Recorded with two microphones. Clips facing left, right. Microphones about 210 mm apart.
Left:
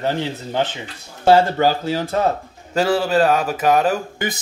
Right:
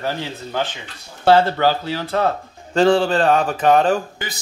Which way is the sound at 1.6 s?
40° left (ahead or behind).